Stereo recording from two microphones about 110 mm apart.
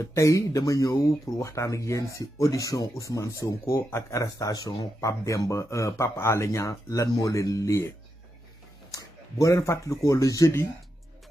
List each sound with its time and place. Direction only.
0.0 s speech: 30° left (ahead or behind)
8.9 s speech: 30° left (ahead or behind)